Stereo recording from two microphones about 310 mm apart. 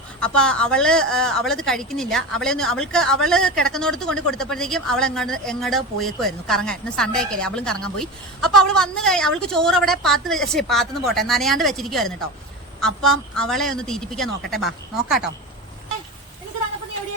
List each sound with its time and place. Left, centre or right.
0.2 s a woman's voice: centre